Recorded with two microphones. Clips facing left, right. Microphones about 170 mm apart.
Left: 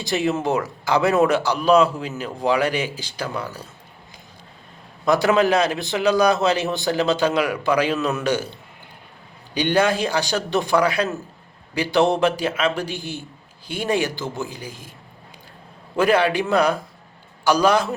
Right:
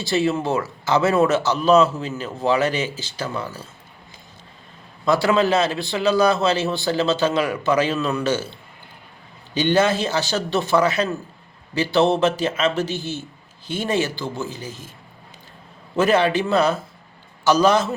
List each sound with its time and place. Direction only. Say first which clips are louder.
0.0 s speech: right 1 dB; 15° left (ahead or behind)
5.0 s speech: left 1 dB; 20° left (ahead or behind)
9.6 s speech: right 1 dB; 10° left (ahead or behind)
16.0 s speech: even; 10° left (ahead or behind)